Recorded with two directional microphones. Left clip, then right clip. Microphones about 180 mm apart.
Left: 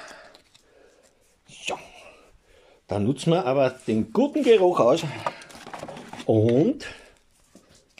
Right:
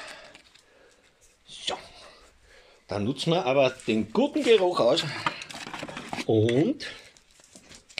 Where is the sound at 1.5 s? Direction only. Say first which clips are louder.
Left 1 dB; 10° left (ahead or behind).